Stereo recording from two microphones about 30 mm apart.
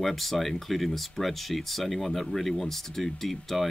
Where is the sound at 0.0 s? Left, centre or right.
Centre.